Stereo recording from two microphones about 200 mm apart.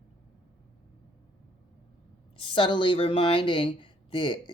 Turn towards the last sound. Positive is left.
turn(degrees=25)  # may be behind; listen again after turning